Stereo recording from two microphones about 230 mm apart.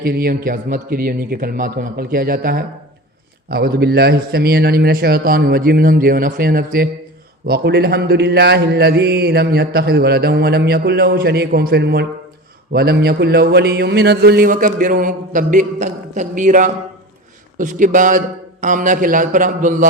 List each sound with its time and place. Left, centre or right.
0.0 s a man's voice: right